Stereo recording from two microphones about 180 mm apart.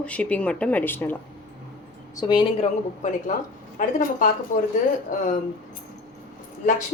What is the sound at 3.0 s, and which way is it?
A woman's voice, 45° left (ahead or behind).